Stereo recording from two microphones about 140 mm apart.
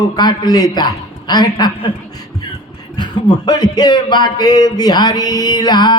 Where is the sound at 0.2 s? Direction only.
30° left (ahead or behind).